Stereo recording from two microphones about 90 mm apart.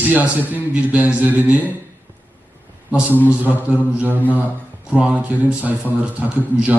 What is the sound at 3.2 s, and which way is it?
Mantra, 20° right (ahead or behind).